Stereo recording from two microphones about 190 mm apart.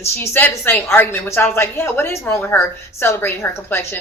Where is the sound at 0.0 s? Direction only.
10° left (ahead or behind).